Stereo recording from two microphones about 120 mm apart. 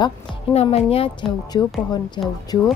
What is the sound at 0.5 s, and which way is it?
Speech, 60° left (ahead or behind).